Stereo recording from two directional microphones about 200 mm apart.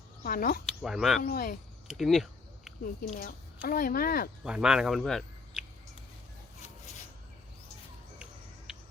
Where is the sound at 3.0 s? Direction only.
35° left (ahead or behind).